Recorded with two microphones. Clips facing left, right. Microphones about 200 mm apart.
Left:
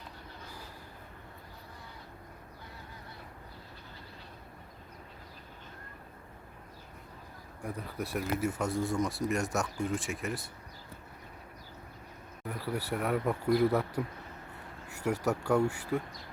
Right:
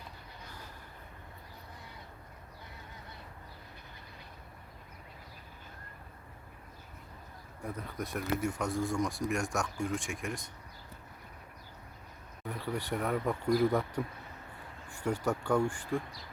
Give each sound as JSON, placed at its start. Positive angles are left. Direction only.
{"t": 7.6, "sound": "speech", "side_deg": 10}
{"t": 12.5, "sound": "speech", "side_deg": 5}